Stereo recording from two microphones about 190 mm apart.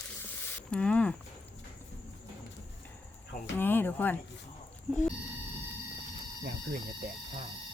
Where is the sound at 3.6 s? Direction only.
10° left (ahead or behind).